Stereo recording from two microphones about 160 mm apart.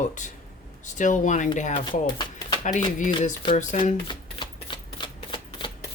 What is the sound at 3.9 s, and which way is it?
Shuffling cards, 30° left (ahead or behind).